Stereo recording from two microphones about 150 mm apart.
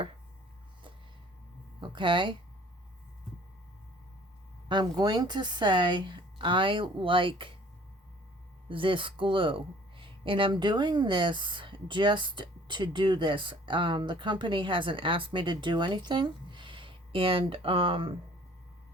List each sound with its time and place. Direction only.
1.8 s speech: 30° right (ahead or behind)
4.7 s speech: 30° right (ahead or behind)
8.7 s speech: 35° right (ahead or behind)